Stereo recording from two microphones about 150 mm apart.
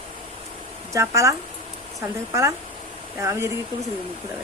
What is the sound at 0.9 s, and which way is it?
Speech, 20° right (ahead or behind).